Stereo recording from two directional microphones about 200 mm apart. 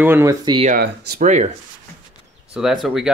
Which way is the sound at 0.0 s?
10° right (ahead or behind).